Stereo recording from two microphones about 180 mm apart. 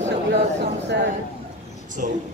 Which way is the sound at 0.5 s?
75° right (ahead or behind).